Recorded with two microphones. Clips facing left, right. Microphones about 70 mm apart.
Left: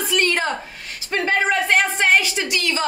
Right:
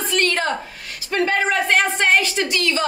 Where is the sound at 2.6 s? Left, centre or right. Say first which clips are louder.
Right 2 dB; centre.